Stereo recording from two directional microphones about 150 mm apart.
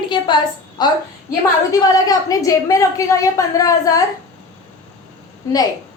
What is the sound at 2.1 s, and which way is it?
A woman's voice, 25° left (ahead or behind).